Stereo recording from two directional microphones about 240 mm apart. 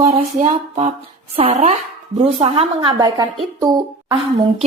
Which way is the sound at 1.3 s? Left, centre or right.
Right.